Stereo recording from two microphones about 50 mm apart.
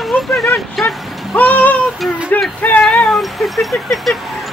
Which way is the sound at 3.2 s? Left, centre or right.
Centre.